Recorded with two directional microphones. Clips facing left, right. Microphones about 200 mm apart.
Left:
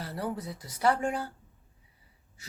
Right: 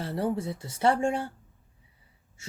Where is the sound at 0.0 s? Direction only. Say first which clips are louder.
Right 6 dB; 25° right (ahead or behind).